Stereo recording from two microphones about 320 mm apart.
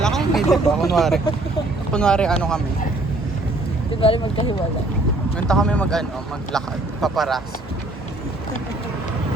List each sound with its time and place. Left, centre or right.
0.0 s speech: centre
4.0 s speech: centre
5.5 s speech: centre